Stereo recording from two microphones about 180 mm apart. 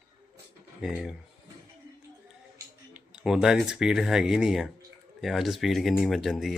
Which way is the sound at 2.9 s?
5° right (ahead or behind).